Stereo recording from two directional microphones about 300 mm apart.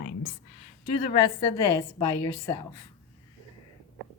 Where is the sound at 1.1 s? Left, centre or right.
Centre.